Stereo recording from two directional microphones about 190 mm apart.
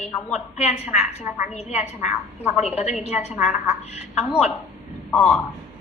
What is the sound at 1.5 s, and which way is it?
A woman's voice, 35° left (ahead or behind).